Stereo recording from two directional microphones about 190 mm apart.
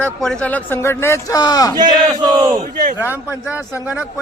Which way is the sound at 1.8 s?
20° right (ahead or behind).